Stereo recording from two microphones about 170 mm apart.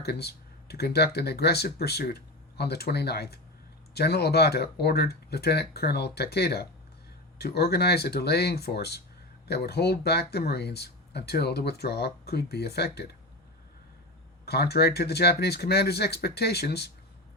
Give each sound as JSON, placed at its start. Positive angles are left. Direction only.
{"t": 0.0, "sound": "speech", "side_deg": 70}
{"t": 14.4, "sound": "speech", "side_deg": 70}